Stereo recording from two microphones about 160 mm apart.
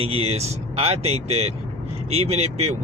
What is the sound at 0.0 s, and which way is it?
Speech, 40° right (ahead or behind).